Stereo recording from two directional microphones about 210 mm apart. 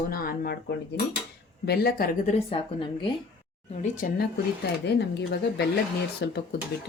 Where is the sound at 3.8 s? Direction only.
40° left (ahead or behind).